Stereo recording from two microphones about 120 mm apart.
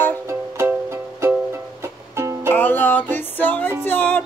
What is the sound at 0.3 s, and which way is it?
Music, 25° right (ahead or behind).